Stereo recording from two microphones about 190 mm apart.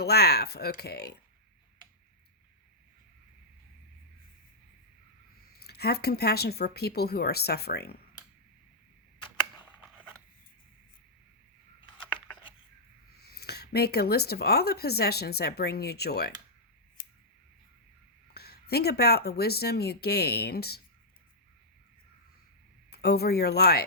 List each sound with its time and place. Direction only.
0.0 s speech: 55° left (ahead or behind)
5.6 s speech: 55° left (ahead or behind)
13.2 s speech: 55° left (ahead or behind)
18.3 s speech: 55° left (ahead or behind)
22.9 s speech: 55° left (ahead or behind)